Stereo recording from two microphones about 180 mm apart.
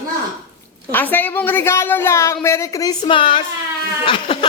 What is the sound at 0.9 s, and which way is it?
A woman's voice, 10° left (ahead or behind).